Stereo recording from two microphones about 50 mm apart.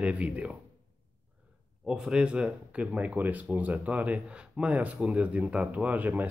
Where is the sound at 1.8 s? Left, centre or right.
Centre.